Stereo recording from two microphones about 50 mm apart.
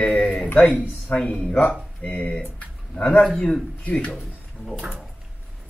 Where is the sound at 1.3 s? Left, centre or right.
Left.